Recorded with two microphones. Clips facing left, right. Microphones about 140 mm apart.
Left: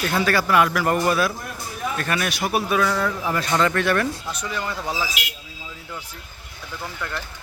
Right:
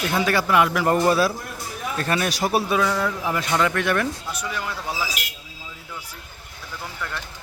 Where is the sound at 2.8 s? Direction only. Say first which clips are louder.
Left 1 dB; 15° right (ahead or behind).